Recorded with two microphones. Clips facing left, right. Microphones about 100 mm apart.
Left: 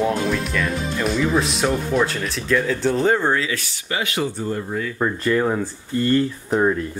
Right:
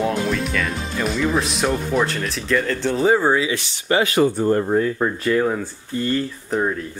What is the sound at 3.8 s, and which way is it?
Speech, 35° right (ahead or behind).